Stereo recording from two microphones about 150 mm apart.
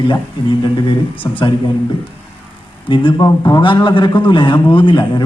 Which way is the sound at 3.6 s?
30° left (ahead or behind).